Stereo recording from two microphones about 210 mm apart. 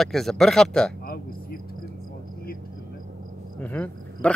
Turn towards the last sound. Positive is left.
turn(degrees=10)  # may be behind; listen again after turning